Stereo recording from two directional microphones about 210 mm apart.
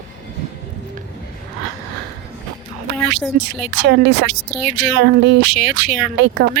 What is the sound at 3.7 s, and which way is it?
Speech, 50° right (ahead or behind).